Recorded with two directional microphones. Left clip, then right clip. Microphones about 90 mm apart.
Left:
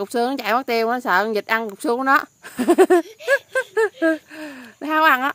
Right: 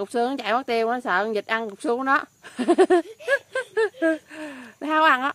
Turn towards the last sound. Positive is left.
turn(degrees=25)  # may be behind; listen again after turning